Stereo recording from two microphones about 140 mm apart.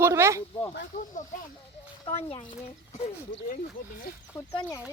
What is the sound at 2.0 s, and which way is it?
Speech, 40° left (ahead or behind).